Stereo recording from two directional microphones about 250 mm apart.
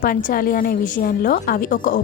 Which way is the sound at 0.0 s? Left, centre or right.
Left.